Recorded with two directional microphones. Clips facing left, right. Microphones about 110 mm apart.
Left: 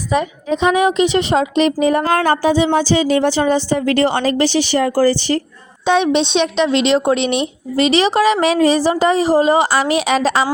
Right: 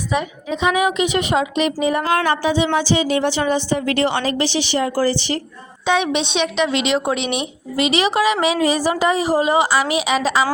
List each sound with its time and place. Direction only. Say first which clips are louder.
0.1 s a woman's voice: left 6 dB; 35° left (ahead or behind)
5.8 s a woman's voice: left 4 dB; 30° left (ahead or behind)
7.2 s speech: left 5 dB; 10° right (ahead or behind)
7.8 s a woman's voice: left 4 dB; 35° left (ahead or behind)